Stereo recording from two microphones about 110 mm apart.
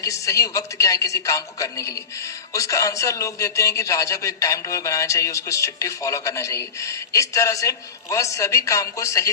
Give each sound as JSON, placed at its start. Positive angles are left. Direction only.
{"t": 0.0, "sound": "a man's voice", "side_deg": 30}